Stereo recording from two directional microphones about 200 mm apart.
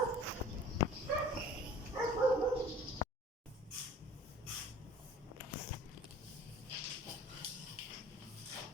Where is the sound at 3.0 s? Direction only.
20° left (ahead or behind).